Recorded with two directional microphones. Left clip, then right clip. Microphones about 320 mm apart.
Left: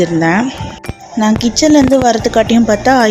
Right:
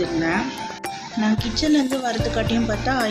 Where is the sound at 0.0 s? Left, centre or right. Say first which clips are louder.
Left 10 dB; left.